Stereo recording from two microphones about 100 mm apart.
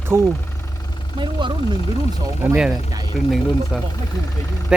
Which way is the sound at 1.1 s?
50° right (ahead or behind).